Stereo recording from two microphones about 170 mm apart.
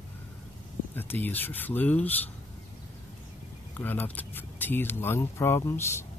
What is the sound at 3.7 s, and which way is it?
Speech, 10° left (ahead or behind).